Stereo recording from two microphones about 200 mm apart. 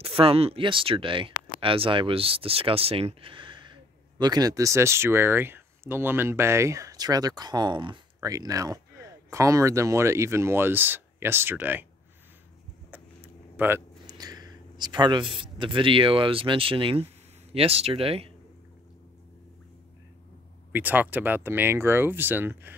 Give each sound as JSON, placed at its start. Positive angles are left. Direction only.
{"t": 0.0, "sound": "speech", "side_deg": -30}
{"t": 13.6, "sound": "speech", "side_deg": -10}
{"t": 20.7, "sound": "speech", "side_deg": -10}